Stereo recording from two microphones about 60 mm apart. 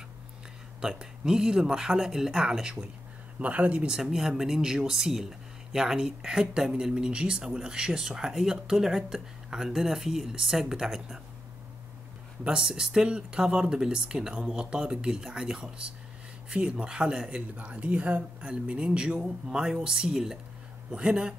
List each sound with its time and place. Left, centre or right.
0.7 s speech: centre
3.9 s speech: centre
12.4 s speech: centre